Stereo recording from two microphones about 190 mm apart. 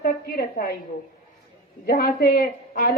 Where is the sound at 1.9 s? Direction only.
50° left (ahead or behind).